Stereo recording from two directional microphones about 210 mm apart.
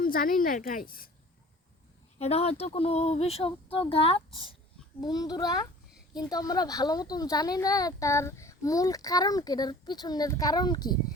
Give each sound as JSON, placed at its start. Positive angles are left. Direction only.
{"t": 0.0, "sound": "a woman's voice", "side_deg": 40}
{"t": 2.1, "sound": "speech", "side_deg": 30}